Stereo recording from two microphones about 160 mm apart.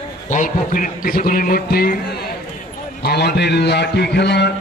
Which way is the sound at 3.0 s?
90° left.